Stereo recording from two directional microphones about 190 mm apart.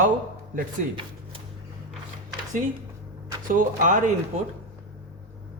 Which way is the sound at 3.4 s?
45° right (ahead or behind).